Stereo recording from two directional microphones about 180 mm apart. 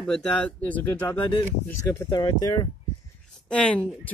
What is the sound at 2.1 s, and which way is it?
Speech, 20° left (ahead or behind).